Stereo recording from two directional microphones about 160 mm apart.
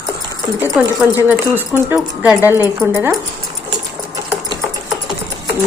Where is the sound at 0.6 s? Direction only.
10° right (ahead or behind).